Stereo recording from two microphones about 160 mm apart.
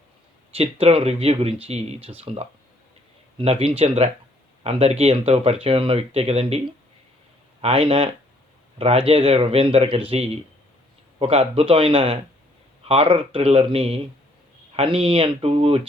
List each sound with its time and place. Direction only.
0.5 s speech: 40° right (ahead or behind)
11.2 s speech: 40° right (ahead or behind)